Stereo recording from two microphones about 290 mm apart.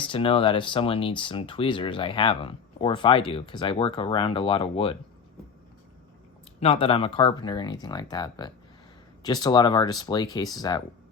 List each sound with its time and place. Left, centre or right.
0.0 s speech: centre
6.6 s speech: centre